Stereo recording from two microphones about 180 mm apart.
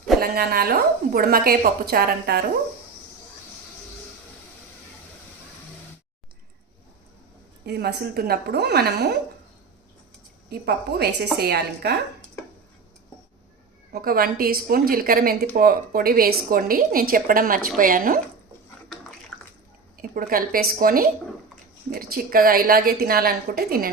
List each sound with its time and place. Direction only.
0.2 s a woman's voice: 55° right (ahead or behind)
7.6 s a woman's voice: 65° right (ahead or behind)
10.5 s a woman's voice: 60° right (ahead or behind)
13.9 s a woman's voice: 55° right (ahead or behind)
20.0 s a woman's voice: 50° right (ahead or behind)